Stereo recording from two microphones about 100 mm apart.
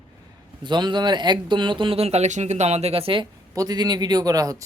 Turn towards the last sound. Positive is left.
turn(degrees=-35)  # may be behind; listen again after turning